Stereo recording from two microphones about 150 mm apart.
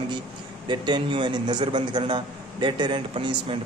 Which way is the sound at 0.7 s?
30° right (ahead or behind).